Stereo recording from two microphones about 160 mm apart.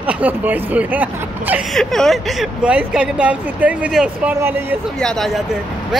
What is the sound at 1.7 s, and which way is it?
Speech, centre (ahead or behind).